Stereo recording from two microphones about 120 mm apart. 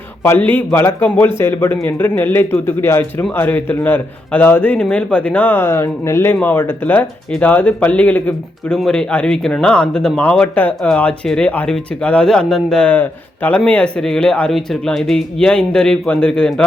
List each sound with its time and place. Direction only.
0.2 s a man's voice: 15° left (ahead or behind)